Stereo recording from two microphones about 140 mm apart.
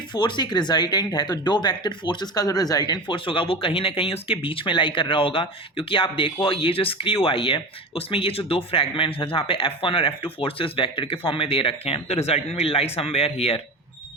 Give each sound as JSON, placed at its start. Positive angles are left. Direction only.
{"t": 0.1, "sound": "speech", "side_deg": 35}